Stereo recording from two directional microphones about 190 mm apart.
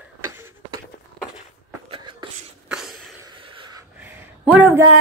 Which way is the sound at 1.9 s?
25° right (ahead or behind).